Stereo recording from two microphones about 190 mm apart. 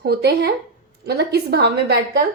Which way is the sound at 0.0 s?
60° right (ahead or behind).